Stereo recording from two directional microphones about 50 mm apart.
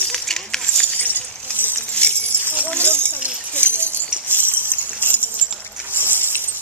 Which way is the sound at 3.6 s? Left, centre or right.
Left.